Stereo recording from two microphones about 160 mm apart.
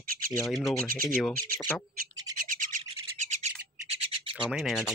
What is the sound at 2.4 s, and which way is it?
Bird, 55° right (ahead or behind).